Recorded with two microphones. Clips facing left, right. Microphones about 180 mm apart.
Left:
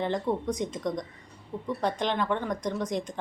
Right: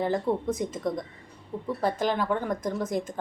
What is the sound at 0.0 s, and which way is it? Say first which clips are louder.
Speech: right 2 dB; 5° right (ahead or behind).